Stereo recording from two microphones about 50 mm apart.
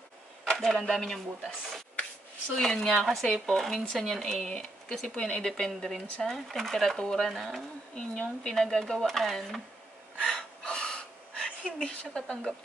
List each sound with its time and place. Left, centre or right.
0.5 s speech: centre
2.5 s speech: centre
7.9 s speech: centre
8.5 s speech: centre
10.2 s a sound: centre
12.2 s speech: centre